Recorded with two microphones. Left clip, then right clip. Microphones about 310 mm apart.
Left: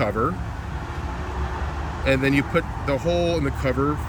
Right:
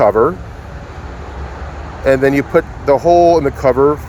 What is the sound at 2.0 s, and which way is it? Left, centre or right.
Speech, centre.